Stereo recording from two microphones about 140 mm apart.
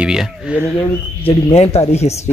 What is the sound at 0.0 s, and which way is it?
Speech, 5° right (ahead or behind).